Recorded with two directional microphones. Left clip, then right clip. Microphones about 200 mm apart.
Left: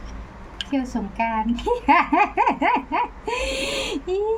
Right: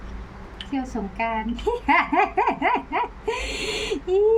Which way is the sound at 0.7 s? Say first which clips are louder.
Left 2 dB; 20° left (ahead or behind).